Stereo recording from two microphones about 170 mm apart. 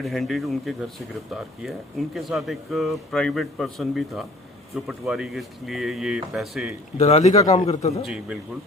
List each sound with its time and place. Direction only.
0.0 s speech: centre (ahead or behind)
6.9 s a man's voice: 40° left (ahead or behind)
8.0 s speech: 5° right (ahead or behind)